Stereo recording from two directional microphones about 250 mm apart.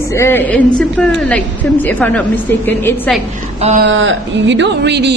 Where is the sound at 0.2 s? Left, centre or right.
Centre.